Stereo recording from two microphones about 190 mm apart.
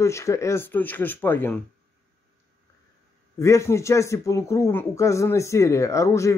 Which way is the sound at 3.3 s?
15° left (ahead or behind).